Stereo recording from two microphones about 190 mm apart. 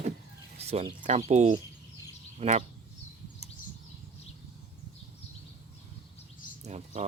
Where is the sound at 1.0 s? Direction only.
35° right (ahead or behind).